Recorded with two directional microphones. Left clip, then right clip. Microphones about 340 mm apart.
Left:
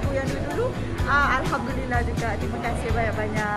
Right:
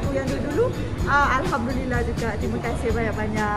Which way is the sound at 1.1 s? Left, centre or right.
Centre.